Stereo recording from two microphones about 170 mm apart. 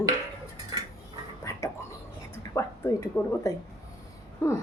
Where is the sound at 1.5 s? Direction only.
20° left (ahead or behind).